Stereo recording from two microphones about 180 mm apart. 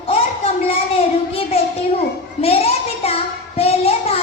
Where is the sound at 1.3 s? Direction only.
35° left (ahead or behind).